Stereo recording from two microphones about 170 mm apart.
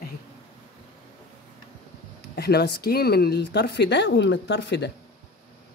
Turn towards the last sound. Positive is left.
turn(degrees=90)